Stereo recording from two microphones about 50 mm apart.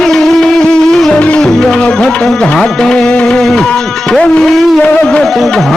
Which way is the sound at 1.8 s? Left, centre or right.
Centre.